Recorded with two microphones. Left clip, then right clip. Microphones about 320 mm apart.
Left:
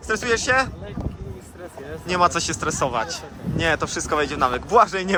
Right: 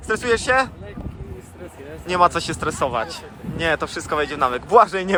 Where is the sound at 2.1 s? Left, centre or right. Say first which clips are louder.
Right 2 dB; centre.